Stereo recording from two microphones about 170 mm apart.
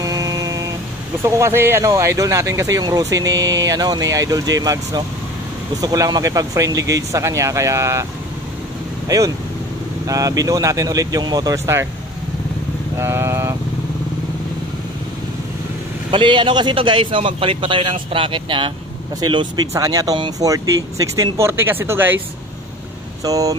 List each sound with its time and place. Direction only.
0.0 s guitar: 20° right (ahead or behind)
1.2 s speech: 15° right (ahead or behind)
12.9 s vehicle: 15° right (ahead or behind)
16.1 s speech: 30° right (ahead or behind); by 22.2 s 15° right (ahead or behind)
23.2 s speech: 20° right (ahead or behind)